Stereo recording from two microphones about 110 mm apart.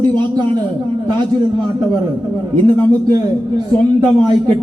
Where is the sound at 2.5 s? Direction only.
40° right (ahead or behind).